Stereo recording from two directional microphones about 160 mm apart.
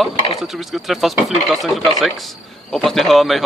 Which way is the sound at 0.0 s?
Centre (ahead or behind).